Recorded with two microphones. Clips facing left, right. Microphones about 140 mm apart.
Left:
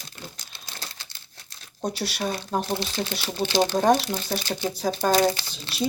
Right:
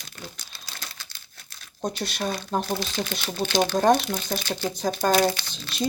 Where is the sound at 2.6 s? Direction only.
25° left (ahead or behind).